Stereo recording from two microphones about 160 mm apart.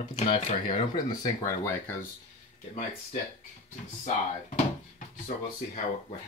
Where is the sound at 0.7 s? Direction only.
25° left (ahead or behind).